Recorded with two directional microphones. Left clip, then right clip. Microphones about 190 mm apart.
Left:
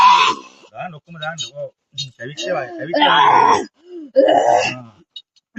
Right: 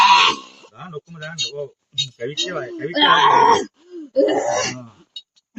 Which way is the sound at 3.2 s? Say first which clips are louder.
Left 3 dB; 30° left (ahead or behind).